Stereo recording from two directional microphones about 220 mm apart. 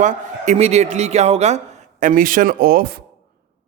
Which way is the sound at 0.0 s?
30° right (ahead or behind).